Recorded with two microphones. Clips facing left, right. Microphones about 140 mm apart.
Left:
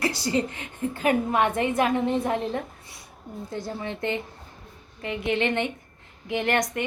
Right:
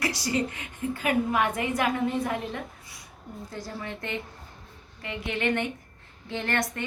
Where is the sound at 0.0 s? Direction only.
30° left (ahead or behind).